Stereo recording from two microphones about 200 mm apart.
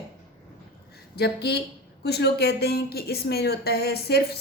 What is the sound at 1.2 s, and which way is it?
A woman's voice, 55° left (ahead or behind).